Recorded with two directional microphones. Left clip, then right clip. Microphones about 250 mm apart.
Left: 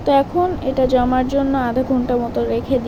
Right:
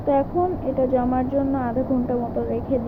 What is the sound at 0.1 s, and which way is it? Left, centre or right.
Speech, left.